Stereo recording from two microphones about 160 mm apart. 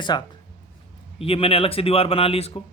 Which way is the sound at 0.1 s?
25° left (ahead or behind).